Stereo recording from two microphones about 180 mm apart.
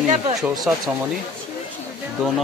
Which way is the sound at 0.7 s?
5° right (ahead or behind).